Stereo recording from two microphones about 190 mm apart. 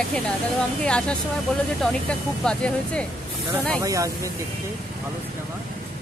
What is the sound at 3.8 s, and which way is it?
Speech, 15° right (ahead or behind).